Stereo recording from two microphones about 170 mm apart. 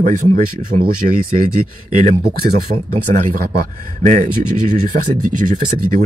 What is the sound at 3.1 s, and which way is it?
Speech, 60° right (ahead or behind).